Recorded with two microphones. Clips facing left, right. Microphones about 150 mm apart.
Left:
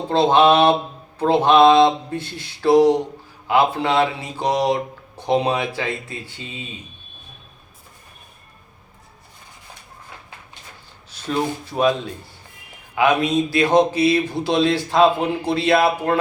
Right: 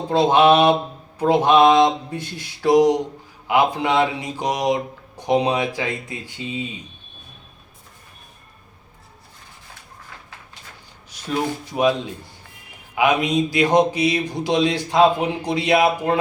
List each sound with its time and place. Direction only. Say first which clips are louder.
0.1 s speech: even; 15° right (ahead or behind)
11.1 s a sound: even; 15° right (ahead or behind)
11.6 s speech: right 1 dB; 15° right (ahead or behind)